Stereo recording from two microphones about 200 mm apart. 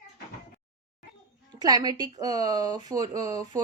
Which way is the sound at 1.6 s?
20° right (ahead or behind).